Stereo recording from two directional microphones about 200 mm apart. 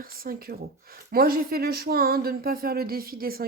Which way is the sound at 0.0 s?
45° right (ahead or behind).